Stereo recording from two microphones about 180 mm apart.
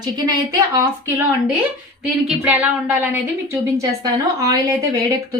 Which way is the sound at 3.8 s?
20° right (ahead or behind).